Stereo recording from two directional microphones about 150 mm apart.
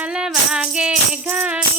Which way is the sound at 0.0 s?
5° right (ahead or behind).